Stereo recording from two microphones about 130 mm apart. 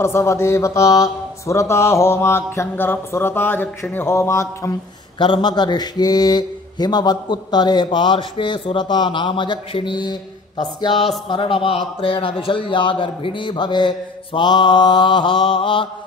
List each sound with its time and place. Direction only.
0.0 s speech: 20° left (ahead or behind)
5.2 s a man's voice: 35° left (ahead or behind)